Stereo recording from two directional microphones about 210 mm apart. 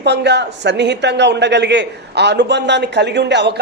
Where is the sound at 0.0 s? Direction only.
55° right (ahead or behind).